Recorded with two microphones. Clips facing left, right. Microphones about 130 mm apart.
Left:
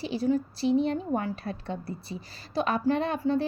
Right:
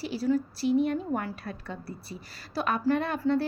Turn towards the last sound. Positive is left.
turn(degrees=15)  # may be behind; listen again after turning